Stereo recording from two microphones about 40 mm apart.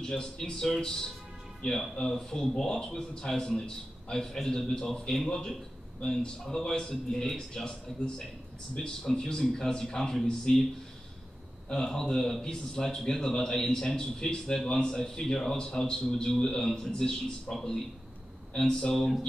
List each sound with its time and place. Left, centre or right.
0.0 s a man's voice: centre
2.3 s a man's voice: centre
7.6 s a man's voice: left
11.7 s a man's voice: centre